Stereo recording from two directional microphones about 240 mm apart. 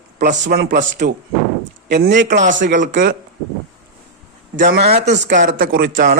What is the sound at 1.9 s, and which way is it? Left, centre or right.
Speech, right.